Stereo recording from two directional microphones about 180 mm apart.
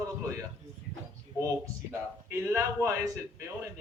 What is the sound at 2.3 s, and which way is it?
A man's voice, 15° right (ahead or behind).